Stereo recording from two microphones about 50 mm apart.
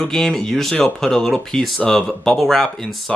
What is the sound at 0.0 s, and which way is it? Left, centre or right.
Speech, centre.